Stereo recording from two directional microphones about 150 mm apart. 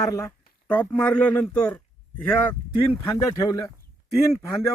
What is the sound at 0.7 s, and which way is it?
Speech, 10° left (ahead or behind).